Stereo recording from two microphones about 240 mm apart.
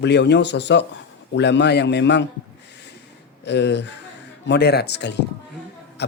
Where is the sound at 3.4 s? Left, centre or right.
Left.